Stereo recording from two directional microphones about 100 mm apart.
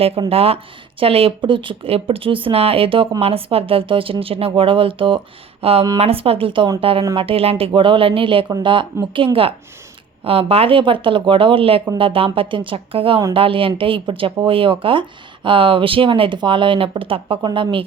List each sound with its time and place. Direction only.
0.3 s speech: 75° right (ahead or behind)
3.2 s speech: 75° right (ahead or behind)
5.6 s speech: 70° right (ahead or behind)